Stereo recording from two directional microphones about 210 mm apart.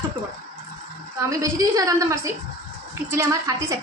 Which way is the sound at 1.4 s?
15° right (ahead or behind).